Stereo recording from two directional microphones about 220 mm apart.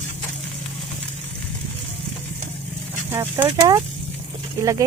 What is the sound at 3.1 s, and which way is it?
Speech, 10° right (ahead or behind).